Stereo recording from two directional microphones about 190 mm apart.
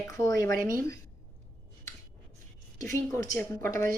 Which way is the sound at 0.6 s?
45° right (ahead or behind).